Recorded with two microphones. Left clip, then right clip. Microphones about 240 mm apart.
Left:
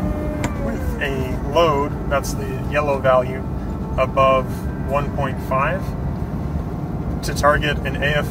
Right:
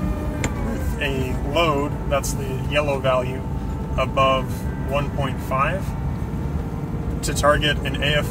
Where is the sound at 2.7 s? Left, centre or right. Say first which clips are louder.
Left 4 dB; right.